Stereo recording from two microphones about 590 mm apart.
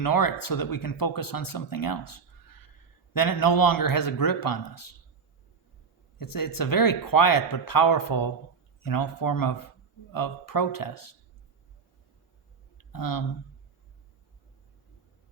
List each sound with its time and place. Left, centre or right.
0.0 s speech: left
6.1 s speech: left
12.7 s a sound: left